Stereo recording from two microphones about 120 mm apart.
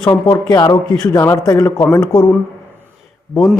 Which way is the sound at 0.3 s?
30° left (ahead or behind).